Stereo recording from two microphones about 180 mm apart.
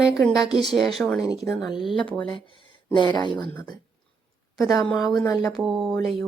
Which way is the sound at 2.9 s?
25° left (ahead or behind).